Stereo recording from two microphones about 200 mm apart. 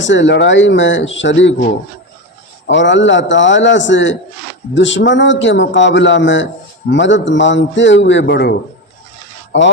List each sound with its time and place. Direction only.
0.0 s a man's voice: 65° left (ahead or behind)
2.6 s a man's voice: 65° left (ahead or behind)
9.5 s a man's voice: 65° left (ahead or behind)